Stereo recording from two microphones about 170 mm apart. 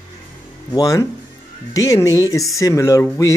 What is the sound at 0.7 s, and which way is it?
Speech, 20° left (ahead or behind).